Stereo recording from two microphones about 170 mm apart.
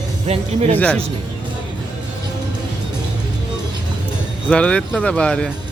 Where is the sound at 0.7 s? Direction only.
10° left (ahead or behind).